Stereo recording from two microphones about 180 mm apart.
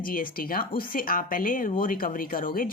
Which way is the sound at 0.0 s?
50° left (ahead or behind).